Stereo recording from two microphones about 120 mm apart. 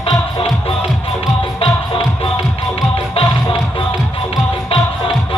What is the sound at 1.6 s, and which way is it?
Music, 50° left (ahead or behind).